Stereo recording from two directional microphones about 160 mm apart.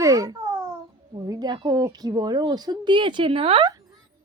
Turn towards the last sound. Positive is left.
turn(degrees=-35)  # may be behind; listen again after turning